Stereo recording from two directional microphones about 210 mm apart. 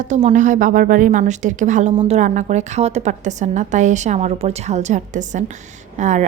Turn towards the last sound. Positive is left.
turn(degrees=-35)  # may be behind; listen again after turning